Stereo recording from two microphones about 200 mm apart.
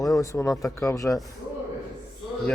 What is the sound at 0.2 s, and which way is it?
Speech, 15° left (ahead or behind).